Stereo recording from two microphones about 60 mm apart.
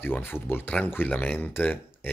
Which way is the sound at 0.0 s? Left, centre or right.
Left.